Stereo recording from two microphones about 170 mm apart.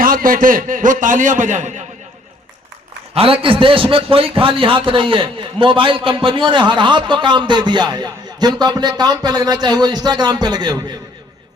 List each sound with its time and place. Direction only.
0.0 s a man's voice: 55° right (ahead or behind)
3.2 s a man's voice: 30° right (ahead or behind)